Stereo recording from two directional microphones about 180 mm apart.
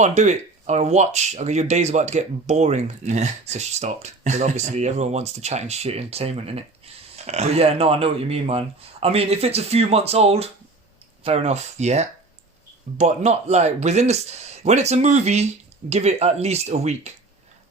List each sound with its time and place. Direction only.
0.0 s speech: 40° right (ahead or behind)